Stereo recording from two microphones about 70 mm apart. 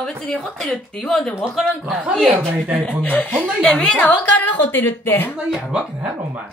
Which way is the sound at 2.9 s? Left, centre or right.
Centre.